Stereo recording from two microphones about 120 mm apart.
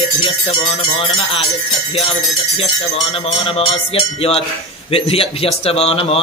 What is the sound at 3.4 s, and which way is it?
Speech, 50° left (ahead or behind).